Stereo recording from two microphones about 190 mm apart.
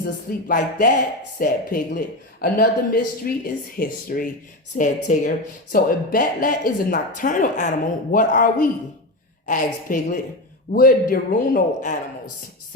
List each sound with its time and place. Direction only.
0.0 s a man's voice: 50° left (ahead or behind)